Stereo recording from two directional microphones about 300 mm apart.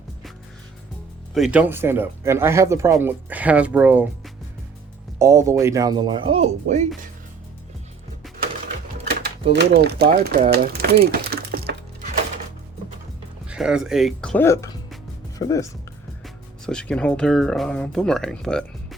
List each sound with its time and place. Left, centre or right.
1.3 s speech: centre
5.2 s speech: centre
9.5 s speech: right
13.5 s speech: centre